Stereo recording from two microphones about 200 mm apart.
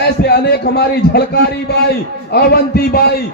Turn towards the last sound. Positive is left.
turn(degrees=50)  # may be behind; listen again after turning